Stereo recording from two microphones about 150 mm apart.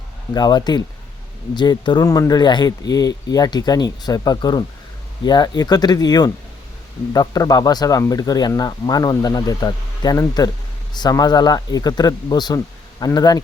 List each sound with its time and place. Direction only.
0.3 s speech: 25° left (ahead or behind)